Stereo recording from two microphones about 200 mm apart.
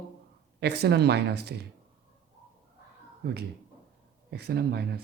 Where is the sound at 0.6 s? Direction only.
55° right (ahead or behind).